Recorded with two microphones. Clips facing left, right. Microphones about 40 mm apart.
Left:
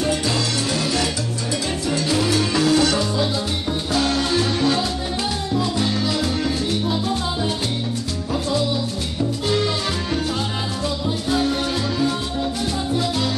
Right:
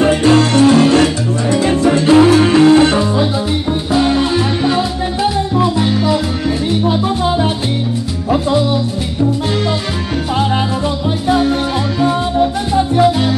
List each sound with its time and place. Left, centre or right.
0.0 s music: right
1.5 s salsa music: right
3.9 s music: right
11.2 s music: right
12.0 s music: right